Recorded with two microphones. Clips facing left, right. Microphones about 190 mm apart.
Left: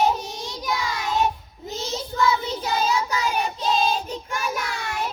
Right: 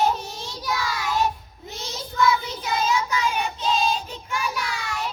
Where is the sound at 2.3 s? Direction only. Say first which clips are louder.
Left 1 dB; 35° left (ahead or behind).